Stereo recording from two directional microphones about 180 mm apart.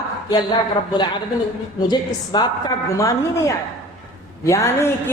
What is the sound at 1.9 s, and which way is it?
A woman's voice, 25° left (ahead or behind).